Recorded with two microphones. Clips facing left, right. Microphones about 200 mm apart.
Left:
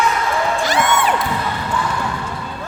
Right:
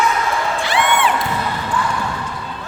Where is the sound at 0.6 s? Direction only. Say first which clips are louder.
Right 3 dB; 40° left (ahead or behind).